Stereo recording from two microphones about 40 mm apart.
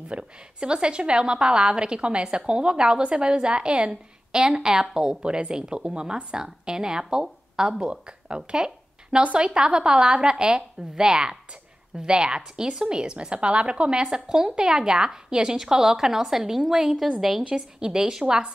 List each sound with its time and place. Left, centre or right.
0.1 s a woman's voice: right